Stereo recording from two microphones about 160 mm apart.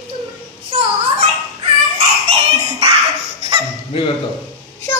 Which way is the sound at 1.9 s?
40° right (ahead or behind).